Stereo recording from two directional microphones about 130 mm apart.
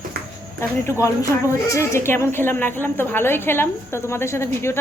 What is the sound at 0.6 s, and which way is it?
A woman's voice, 20° left (ahead or behind).